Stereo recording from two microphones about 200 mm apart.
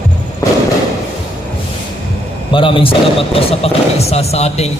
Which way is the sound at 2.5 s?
25° left (ahead or behind).